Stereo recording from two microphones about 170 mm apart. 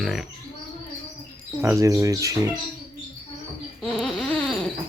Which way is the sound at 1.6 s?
15° right (ahead or behind).